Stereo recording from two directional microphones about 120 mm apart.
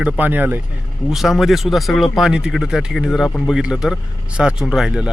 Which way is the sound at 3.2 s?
10° left (ahead or behind).